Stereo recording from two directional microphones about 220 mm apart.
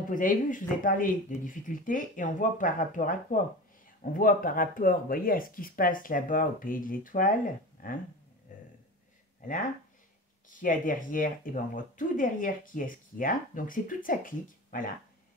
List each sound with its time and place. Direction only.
0.1 s speech: 35° left (ahead or behind)
8.5 s a sound: 35° left (ahead or behind)
10.6 s speech: 40° left (ahead or behind)